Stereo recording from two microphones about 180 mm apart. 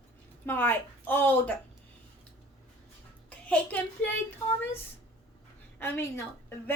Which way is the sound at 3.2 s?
10° left (ahead or behind).